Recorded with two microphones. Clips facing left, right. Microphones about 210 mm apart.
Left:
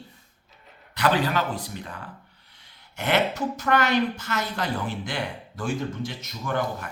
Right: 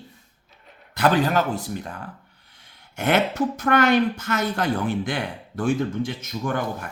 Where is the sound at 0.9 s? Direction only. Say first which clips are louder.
Right 4 dB; 45° right (ahead or behind).